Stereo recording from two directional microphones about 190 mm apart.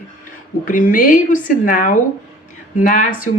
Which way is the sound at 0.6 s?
45° left (ahead or behind).